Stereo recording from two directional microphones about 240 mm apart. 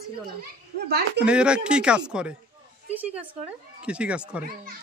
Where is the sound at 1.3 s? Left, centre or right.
Centre.